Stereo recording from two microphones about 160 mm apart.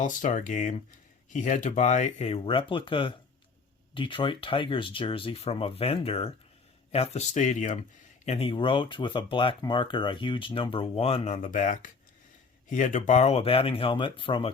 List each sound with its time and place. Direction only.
0.0 s speech: 55° left (ahead or behind); by 11.3 s 35° left (ahead or behind)
11.4 s speech: 55° left (ahead or behind); by 14.5 s 35° left (ahead or behind)